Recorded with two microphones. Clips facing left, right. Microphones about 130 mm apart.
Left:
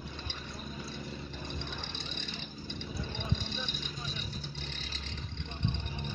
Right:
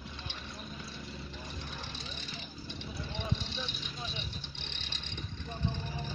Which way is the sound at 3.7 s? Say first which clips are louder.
Left 1 dB; 45° left (ahead or behind).